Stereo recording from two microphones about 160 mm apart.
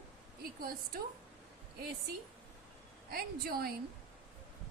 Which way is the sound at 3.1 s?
70° right (ahead or behind).